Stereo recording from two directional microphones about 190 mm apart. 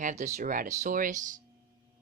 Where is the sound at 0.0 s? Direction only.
40° right (ahead or behind).